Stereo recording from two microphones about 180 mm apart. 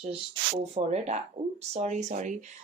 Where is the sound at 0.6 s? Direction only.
35° right (ahead or behind).